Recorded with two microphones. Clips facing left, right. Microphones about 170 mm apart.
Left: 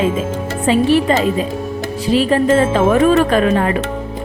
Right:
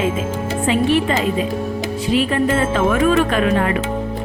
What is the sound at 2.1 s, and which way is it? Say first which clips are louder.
Speech: left 5 dB; 35° left (ahead or behind).